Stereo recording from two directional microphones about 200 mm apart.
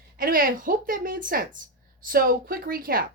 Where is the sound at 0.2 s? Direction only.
45° right (ahead or behind).